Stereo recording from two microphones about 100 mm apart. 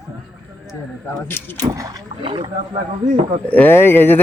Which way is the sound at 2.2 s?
60° right (ahead or behind).